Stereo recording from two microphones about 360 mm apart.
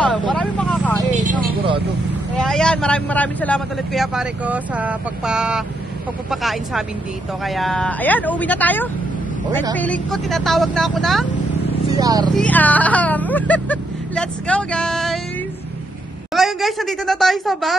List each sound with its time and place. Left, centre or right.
0.0 s vehicle: centre
1.1 s a sound: centre
2.3 s speech: centre
12.0 s speech: centre
12.4 s speech: centre
16.3 s speech: centre